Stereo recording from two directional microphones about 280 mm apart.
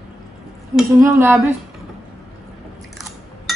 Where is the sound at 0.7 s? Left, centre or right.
Centre.